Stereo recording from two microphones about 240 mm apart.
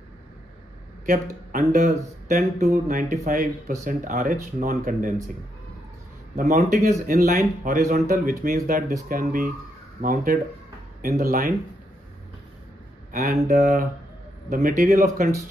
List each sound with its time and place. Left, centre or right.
1.5 s speech: right
6.3 s speech: right
13.2 s speech: right